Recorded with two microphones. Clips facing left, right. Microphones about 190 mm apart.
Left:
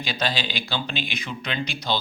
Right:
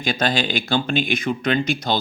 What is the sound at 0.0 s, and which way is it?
Speech, 50° right (ahead or behind).